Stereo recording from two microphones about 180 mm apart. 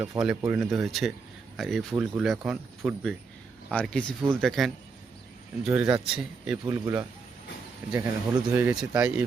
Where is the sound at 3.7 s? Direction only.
5° left (ahead or behind).